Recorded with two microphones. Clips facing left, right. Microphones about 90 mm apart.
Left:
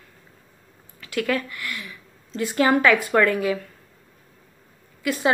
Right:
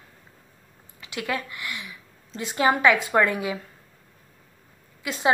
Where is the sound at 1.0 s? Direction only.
20° right (ahead or behind).